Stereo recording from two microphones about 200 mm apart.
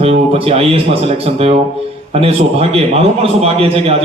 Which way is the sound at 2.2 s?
30° right (ahead or behind).